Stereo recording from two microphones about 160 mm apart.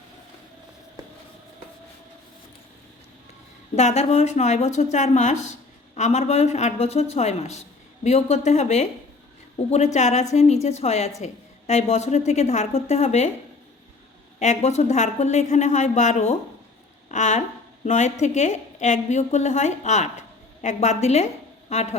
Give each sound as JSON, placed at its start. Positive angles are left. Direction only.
{"t": 3.8, "sound": "a woman's voice", "side_deg": 45}
{"t": 14.3, "sound": "a woman's voice", "side_deg": 45}